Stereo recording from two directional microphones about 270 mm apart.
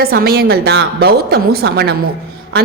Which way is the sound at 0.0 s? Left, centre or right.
Right.